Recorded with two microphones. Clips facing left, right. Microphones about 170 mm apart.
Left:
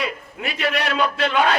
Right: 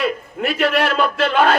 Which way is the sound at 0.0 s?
50° right (ahead or behind).